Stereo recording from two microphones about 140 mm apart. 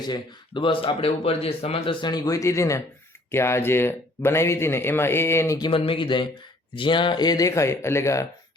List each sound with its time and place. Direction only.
0.0 s speech: 35° left (ahead or behind); by 5.5 s 20° left (ahead or behind)
5.5 s speech: 35° left (ahead or behind)